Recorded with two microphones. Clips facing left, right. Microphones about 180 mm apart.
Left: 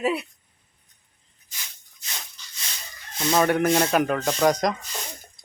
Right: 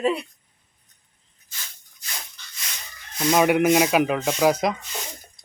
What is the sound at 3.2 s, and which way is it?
Speech, 15° right (ahead or behind).